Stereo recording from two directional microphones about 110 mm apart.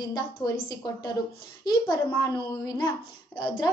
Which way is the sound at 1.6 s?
40° left (ahead or behind).